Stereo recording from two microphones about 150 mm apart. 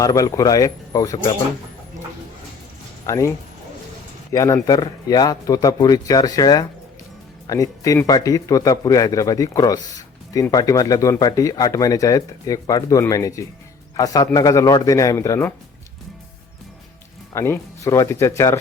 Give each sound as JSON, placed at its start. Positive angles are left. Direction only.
{"t": 0.0, "sound": "speech", "side_deg": 25}
{"t": 3.1, "sound": "a man's voice", "side_deg": 20}
{"t": 17.3, "sound": "speech", "side_deg": 15}